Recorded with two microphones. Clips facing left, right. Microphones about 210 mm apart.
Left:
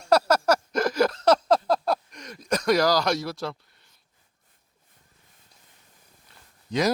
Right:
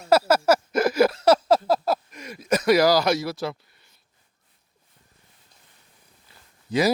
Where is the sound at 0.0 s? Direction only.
5° right (ahead or behind).